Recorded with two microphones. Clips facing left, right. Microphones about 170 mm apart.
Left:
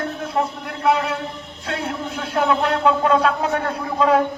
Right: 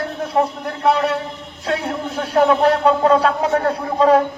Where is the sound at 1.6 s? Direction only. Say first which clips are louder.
Right 4 dB; 35° right (ahead or behind).